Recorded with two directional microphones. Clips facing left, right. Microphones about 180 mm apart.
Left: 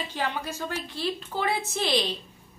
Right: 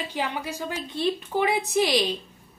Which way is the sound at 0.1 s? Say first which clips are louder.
Right 1 dB; 15° right (ahead or behind).